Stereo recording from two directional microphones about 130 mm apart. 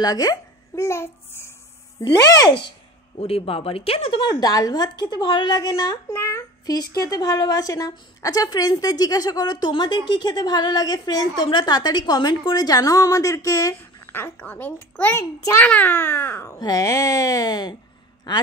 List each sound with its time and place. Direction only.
0.0 s a child's voice: 30° left (ahead or behind)
2.0 s speech: 35° left (ahead or behind)
3.2 s speech: 50° left (ahead or behind)
4.3 s a child's voice: 30° left (ahead or behind)